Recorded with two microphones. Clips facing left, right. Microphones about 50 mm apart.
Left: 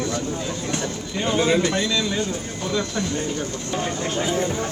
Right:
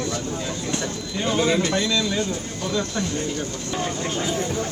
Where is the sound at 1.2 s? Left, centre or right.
Centre.